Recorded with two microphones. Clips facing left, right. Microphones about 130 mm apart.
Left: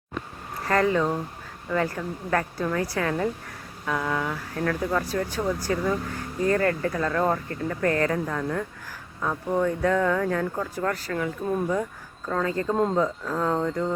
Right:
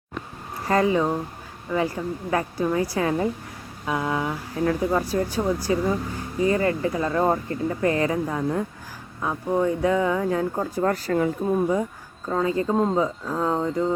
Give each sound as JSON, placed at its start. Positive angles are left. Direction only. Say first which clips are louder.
{"t": 0.7, "sound": "speech", "louder": "right 2 dB", "side_deg": -15}
{"t": 10.6, "sound": "speech", "louder": "right 4 dB", "side_deg": -30}
{"t": 11.4, "sound": "speech", "louder": "right 3 dB", "side_deg": -15}